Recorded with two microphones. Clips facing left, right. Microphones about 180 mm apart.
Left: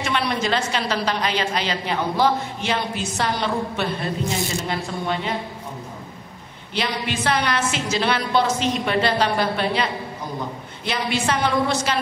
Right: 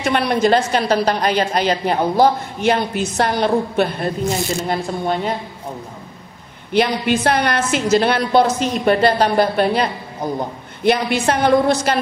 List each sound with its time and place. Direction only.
0.0 s a woman's voice: 50° right (ahead or behind)
6.7 s a woman's voice: 55° right (ahead or behind)